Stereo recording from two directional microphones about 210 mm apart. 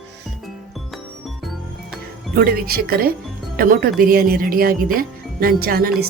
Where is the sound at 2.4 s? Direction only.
45° right (ahead or behind).